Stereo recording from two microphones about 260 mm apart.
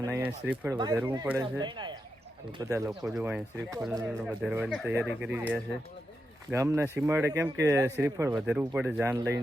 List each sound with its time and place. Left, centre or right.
0.0 s speech: centre
3.0 s speech: centre